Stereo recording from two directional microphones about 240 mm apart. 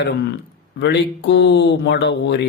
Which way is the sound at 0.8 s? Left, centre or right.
Left.